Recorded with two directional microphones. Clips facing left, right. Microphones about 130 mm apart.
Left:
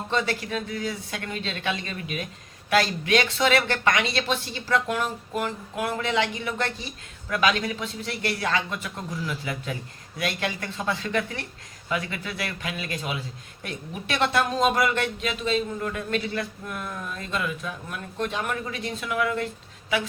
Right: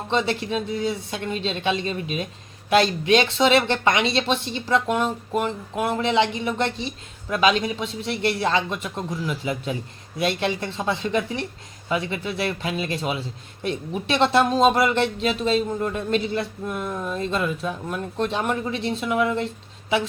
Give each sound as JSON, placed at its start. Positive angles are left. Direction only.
{"t": 0.1, "sound": "speech", "side_deg": -25}